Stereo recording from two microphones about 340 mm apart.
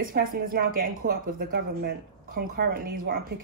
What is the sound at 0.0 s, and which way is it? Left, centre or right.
A woman's voice, right.